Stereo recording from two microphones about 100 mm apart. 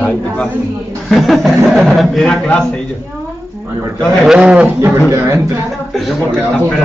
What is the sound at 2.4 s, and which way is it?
Speech, 10° left (ahead or behind).